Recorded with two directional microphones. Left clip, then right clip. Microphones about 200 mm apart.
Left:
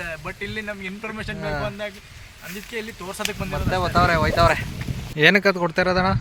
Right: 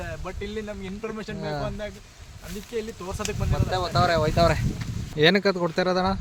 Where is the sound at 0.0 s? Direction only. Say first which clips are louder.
Left 4 dB; 15° right (ahead or behind).